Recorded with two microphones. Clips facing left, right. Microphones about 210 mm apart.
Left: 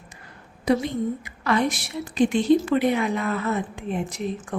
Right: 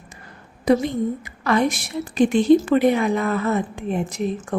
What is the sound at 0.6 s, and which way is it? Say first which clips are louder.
A woman's voice: right 4 dB; 45° right (ahead or behind).